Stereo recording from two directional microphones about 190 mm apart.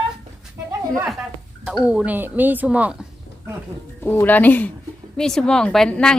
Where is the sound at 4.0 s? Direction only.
10° left (ahead or behind).